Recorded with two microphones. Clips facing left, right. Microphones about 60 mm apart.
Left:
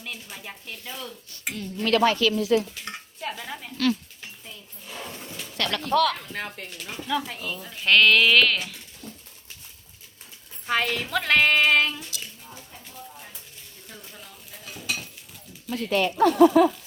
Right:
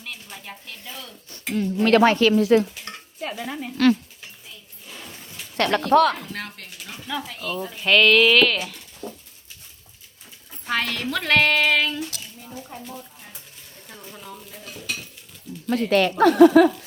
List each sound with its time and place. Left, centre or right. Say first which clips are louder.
0.0 s speech: even; centre
0.7 s child singing: left 4 dB; centre
1.5 s dishes: right 6 dB; right
3.2 s stir: right 5 dB; centre
5.5 s speech: right 6 dB; right
6.3 s child singing: left 1 dB; centre
7.3 s speech: right 5 dB; centre
10.7 s child singing: even; centre
13.8 s speech: right 5 dB; centre
14.5 s dishes: left 2 dB; centre
15.6 s speech: right 5 dB; right